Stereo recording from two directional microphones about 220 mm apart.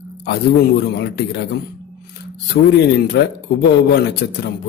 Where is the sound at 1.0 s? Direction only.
50° left (ahead or behind).